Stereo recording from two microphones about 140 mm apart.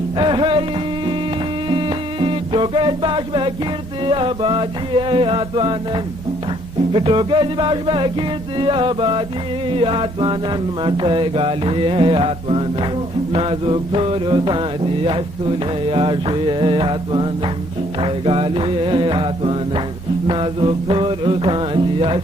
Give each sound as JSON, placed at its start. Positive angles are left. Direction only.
{"t": 0.2, "sound": "music", "side_deg": -35}
{"t": 1.7, "sound": "music", "side_deg": -40}
{"t": 4.1, "sound": "mantra", "side_deg": -35}
{"t": 6.9, "sound": "mantra", "side_deg": -35}